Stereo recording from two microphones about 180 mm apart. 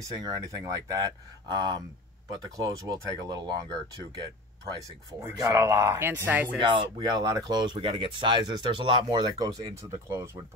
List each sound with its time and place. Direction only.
0.0 s speech: 20° right (ahead or behind)
5.2 s speech: 15° right (ahead or behind)
6.6 s speech: 25° right (ahead or behind)